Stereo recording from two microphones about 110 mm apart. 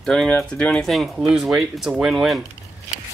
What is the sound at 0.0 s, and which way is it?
Speech, 5° left (ahead or behind).